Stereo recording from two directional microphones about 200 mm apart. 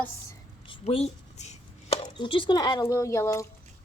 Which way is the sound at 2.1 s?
25° left (ahead or behind).